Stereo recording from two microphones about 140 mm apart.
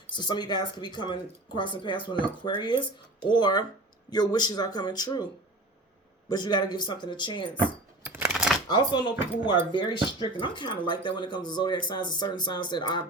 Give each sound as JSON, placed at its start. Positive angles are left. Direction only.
{"t": 0.1, "sound": "speech", "side_deg": 30}
{"t": 6.2, "sound": "speech", "side_deg": 30}
{"t": 8.0, "sound": "a sound", "side_deg": -15}
{"t": 8.3, "sound": "shuffling cards", "side_deg": -5}
{"t": 8.7, "sound": "speech", "side_deg": 30}